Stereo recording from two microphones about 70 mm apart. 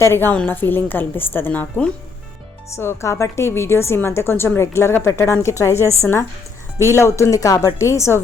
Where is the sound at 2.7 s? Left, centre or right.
Left.